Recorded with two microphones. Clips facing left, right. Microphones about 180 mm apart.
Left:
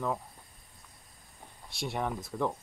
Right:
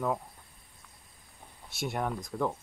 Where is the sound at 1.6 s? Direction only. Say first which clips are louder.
Right 1 dB; centre (ahead or behind).